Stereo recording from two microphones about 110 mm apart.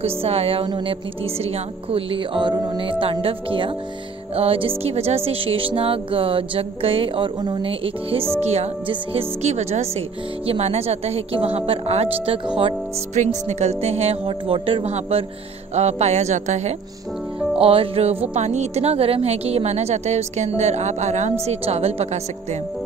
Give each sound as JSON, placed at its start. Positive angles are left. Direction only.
{"t": 0.0, "sound": "speech", "side_deg": -65}
{"t": 0.7, "sound": "music", "side_deg": -45}
{"t": 1.2, "sound": "speech", "side_deg": -65}
{"t": 8.4, "sound": "a woman's voice", "side_deg": -75}
{"t": 13.1, "sound": "a woman's voice", "side_deg": -90}
{"t": 14.9, "sound": "a woman's voice", "side_deg": -80}
{"t": 17.6, "sound": "speech", "side_deg": -60}
{"t": 18.4, "sound": "a woman's voice", "side_deg": -90}